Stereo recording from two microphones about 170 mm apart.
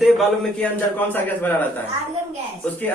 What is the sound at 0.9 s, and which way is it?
Speech, 10° left (ahead or behind).